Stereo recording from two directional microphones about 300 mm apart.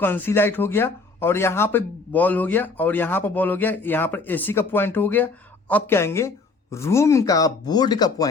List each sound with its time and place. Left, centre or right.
0.0 s speech: centre